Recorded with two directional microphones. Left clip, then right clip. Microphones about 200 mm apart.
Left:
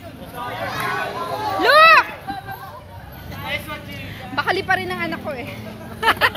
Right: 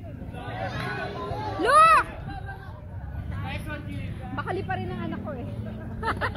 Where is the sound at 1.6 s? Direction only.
5° right (ahead or behind).